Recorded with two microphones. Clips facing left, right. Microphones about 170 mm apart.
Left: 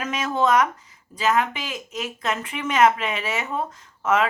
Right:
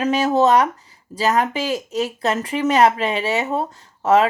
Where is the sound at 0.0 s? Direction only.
35° right (ahead or behind).